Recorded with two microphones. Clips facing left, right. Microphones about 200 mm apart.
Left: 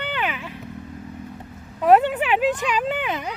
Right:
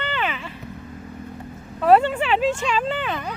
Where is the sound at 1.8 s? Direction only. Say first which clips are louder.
Even; 10° left (ahead or behind).